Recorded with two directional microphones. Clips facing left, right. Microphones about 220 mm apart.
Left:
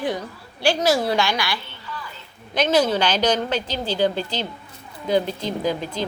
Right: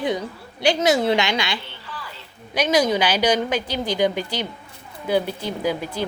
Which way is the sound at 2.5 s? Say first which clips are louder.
Even; 10° right (ahead or behind).